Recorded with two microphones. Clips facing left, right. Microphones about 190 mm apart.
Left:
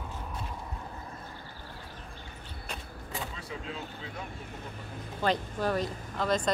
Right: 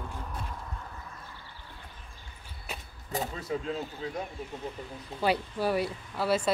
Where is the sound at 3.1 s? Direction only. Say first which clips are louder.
Right 7 dB; 40° right (ahead or behind).